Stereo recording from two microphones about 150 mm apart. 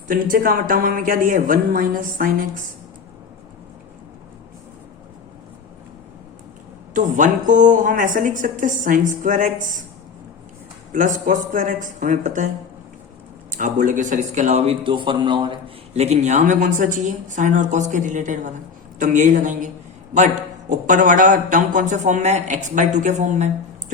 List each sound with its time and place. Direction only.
0.1 s a woman's voice: 70° right (ahead or behind)
6.9 s a man's voice: 60° right (ahead or behind)
10.9 s a man's voice: 60° right (ahead or behind)
13.6 s speech: 60° right (ahead or behind); by 15.5 s 30° right (ahead or behind)
16.0 s a man's voice: 50° right (ahead or behind)